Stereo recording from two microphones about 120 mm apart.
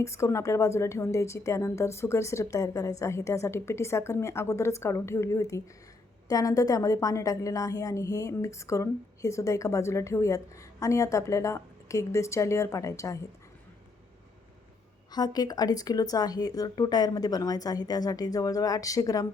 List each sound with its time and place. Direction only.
0.0 s a woman's voice: 25° left (ahead or behind)
15.1 s speech: 35° left (ahead or behind)